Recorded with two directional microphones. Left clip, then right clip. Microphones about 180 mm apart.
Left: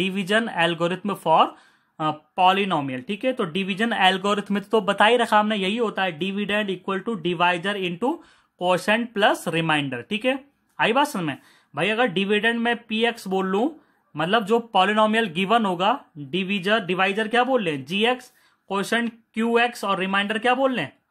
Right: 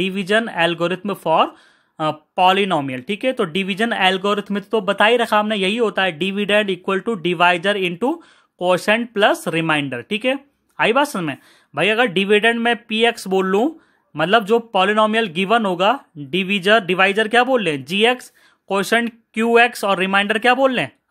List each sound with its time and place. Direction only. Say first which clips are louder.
0.0 s speech: right 4 dB; 20° right (ahead or behind)
2.0 s speech: right 4 dB; 30° right (ahead or behind)